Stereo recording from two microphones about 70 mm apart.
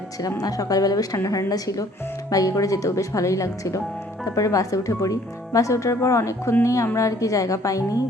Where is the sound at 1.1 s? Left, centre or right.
Left.